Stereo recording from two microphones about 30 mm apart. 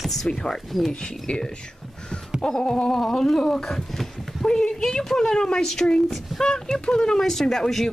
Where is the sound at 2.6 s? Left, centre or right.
Left.